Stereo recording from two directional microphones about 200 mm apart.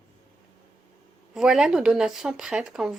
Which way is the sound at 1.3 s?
Centre (ahead or behind).